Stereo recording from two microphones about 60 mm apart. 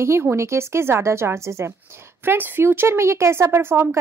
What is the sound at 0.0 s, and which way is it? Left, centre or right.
A woman's voice, right.